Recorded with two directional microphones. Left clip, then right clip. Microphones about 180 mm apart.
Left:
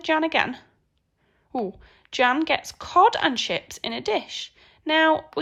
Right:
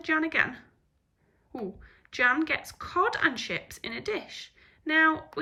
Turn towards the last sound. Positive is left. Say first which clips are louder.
# left 4 dB
turn(degrees=10)  # may be behind; listen again after turning